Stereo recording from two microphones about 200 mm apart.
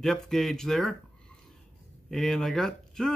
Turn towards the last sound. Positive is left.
turn(degrees=0)  # may be behind; listen again after turning